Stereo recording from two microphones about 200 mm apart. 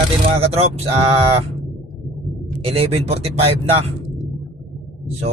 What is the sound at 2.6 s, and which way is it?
Speech, 30° right (ahead or behind).